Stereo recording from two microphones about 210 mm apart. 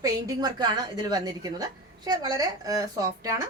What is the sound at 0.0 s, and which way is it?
A woman's voice, 15° right (ahead or behind).